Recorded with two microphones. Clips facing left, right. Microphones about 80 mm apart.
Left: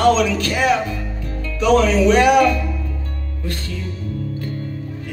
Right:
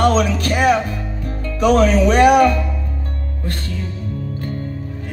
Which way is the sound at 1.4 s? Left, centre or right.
Right.